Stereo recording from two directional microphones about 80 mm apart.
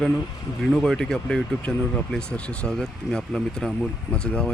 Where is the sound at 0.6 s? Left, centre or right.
Centre.